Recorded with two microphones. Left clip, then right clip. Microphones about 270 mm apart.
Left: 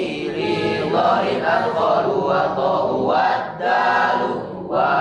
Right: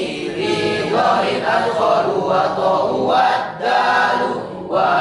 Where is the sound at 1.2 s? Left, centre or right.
Centre.